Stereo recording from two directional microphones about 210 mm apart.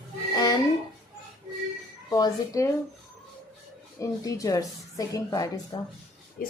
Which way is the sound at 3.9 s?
15° left (ahead or behind).